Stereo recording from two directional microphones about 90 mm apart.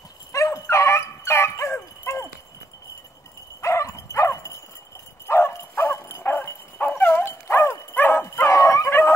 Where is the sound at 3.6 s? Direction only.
35° left (ahead or behind).